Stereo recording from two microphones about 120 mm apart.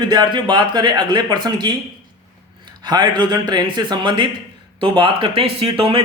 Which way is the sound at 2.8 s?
35° right (ahead or behind).